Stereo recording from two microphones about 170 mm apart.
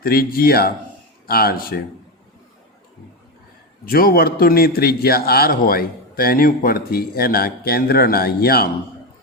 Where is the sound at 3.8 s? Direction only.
60° left (ahead or behind).